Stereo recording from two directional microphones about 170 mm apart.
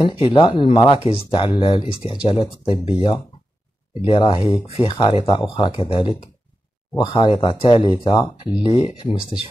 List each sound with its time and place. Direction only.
0.0 s speech: 30° left (ahead or behind)
4.2 s speech: 25° left (ahead or behind)
8.8 s speech: 40° left (ahead or behind)